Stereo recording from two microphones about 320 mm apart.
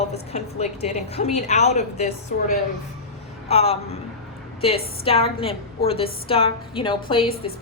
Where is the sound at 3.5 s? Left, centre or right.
Centre.